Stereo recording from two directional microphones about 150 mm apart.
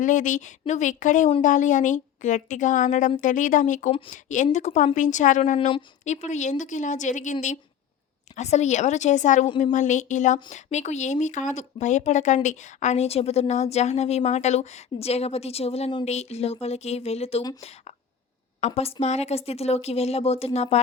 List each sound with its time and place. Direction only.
0.0 s a woman's voice: 60° left (ahead or behind)
8.4 s a woman's voice: 50° left (ahead or behind)